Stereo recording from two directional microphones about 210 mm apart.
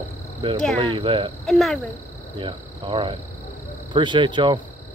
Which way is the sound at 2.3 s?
25° right (ahead or behind).